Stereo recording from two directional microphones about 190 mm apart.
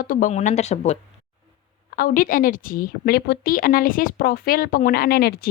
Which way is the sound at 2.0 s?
45° left (ahead or behind).